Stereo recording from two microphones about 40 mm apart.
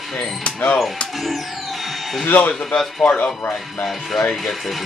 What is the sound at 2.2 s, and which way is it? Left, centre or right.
Speech, left.